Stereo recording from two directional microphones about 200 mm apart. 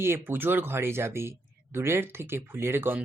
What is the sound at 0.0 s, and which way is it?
Speech, 10° right (ahead or behind).